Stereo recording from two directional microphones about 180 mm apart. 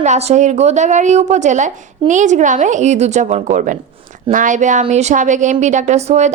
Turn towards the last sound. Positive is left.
turn(degrees=-40)  # may be behind; listen again after turning